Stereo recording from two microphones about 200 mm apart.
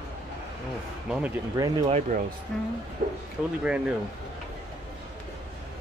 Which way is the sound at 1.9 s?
35° right (ahead or behind).